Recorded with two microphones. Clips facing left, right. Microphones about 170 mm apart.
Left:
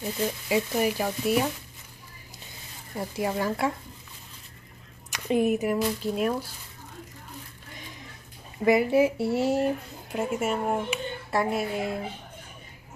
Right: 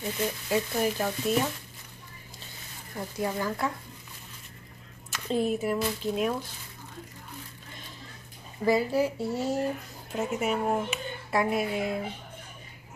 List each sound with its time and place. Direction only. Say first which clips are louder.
0.0 s speech: left 2 dB; 5° left (ahead or behind)
3.0 s speech: left 3 dB; 20° left (ahead or behind)
5.1 s speech: left 4 dB; 15° left (ahead or behind)
8.6 s speech: left 4 dB; 20° left (ahead or behind)
9.2 s speech: left 5 dB; 70° left (ahead or behind)
10.2 s speech: left 1 dB; centre (ahead or behind)